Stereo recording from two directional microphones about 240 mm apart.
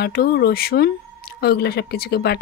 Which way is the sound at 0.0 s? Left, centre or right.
Left.